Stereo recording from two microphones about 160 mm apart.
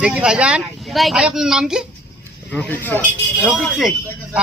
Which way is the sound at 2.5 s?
10° left (ahead or behind).